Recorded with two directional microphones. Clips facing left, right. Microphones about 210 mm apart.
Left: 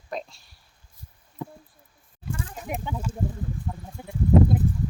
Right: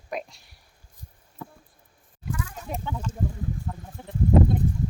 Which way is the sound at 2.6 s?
15° left (ahead or behind).